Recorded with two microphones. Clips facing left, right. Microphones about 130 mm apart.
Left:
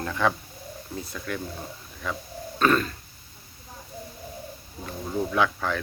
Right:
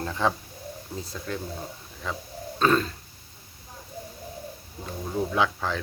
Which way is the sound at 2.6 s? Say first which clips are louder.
Even; 30° right (ahead or behind).